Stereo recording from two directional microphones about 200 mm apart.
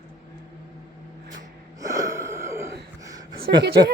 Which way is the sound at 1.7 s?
15° right (ahead or behind).